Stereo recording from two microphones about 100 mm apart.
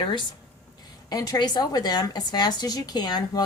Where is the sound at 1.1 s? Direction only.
40° left (ahead or behind).